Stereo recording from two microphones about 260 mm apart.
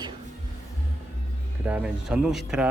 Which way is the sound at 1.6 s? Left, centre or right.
Centre.